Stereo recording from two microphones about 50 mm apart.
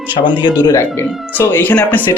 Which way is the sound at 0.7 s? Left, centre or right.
Left.